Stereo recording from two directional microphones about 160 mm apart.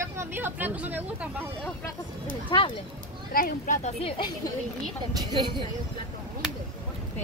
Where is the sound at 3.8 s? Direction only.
35° left (ahead or behind).